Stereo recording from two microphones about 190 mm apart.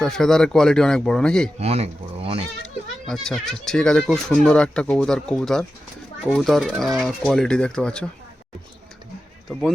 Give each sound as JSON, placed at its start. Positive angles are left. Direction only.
{"t": 0.0, "sound": "speech", "side_deg": 5}
{"t": 1.5, "sound": "speech", "side_deg": -35}
{"t": 3.1, "sound": "speech", "side_deg": 0}
{"t": 9.5, "sound": "speech", "side_deg": 0}